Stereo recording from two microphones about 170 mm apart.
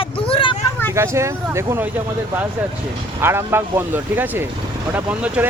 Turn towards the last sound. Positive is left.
turn(degrees=-5)  # may be behind; listen again after turning